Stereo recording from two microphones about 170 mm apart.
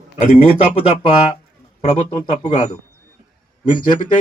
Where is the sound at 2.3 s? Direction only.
35° left (ahead or behind).